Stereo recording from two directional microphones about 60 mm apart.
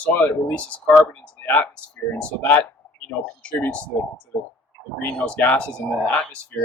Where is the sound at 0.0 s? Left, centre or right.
Left.